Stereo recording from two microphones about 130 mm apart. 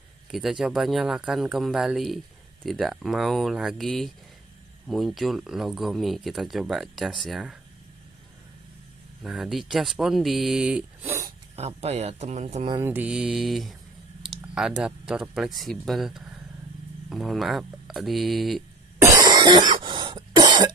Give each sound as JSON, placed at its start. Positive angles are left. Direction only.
{"t": 0.3, "sound": "speech", "side_deg": -5}
{"t": 9.2, "sound": "speech", "side_deg": -5}
{"t": 11.1, "sound": "a sound", "side_deg": -25}
{"t": 11.5, "sound": "speech", "side_deg": -55}
{"t": 12.8, "sound": "mantra", "side_deg": -10}
{"t": 14.3, "sound": "speech", "side_deg": -5}
{"t": 18.9, "sound": "cough", "side_deg": -30}